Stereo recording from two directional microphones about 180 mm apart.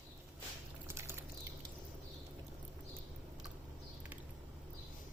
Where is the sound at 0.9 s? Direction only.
15° right (ahead or behind).